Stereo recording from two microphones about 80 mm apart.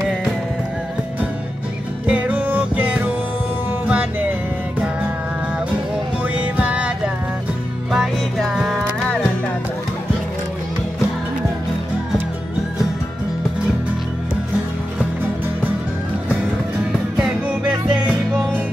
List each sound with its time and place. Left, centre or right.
2.0 s music: right
6.2 s music: centre
7.9 s music: centre
17.2 s music: centre
17.6 s music: right